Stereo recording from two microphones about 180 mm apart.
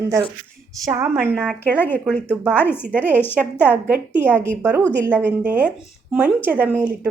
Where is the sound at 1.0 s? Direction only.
5° left (ahead or behind).